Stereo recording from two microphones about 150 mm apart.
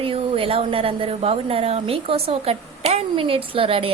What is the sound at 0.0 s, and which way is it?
A woman's voice, 40° right (ahead or behind).